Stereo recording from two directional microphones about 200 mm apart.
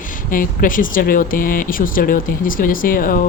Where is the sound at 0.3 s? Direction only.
45° left (ahead or behind).